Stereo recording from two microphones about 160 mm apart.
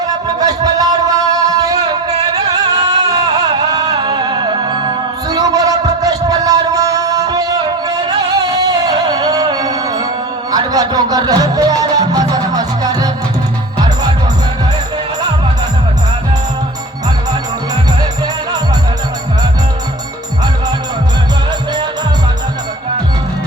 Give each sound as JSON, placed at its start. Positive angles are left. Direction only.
{"t": 0.3, "sound": "music", "side_deg": -25}